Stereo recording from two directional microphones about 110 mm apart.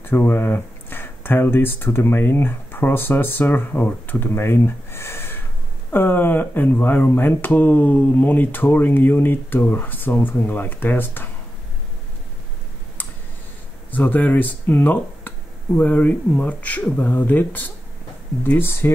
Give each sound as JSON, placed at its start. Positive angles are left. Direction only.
{"t": 0.0, "sound": "speech", "side_deg": 20}
{"t": 13.9, "sound": "speech", "side_deg": 15}